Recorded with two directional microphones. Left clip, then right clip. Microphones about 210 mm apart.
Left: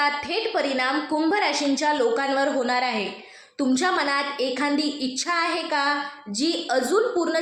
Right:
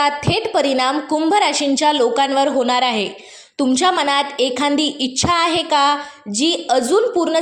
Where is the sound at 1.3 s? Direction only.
55° right (ahead or behind).